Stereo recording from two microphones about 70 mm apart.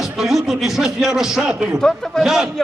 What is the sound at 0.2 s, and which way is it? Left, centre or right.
A man's voice, centre.